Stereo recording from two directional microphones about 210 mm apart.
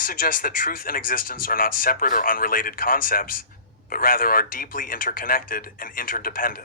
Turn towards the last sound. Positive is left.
turn(degrees=45)  # may be behind; listen again after turning